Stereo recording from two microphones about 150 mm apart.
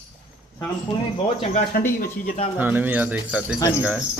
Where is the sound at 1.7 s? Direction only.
90° left.